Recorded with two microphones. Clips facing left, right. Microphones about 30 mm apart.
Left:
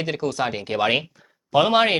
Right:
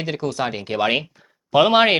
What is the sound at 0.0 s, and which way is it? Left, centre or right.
Speech, centre.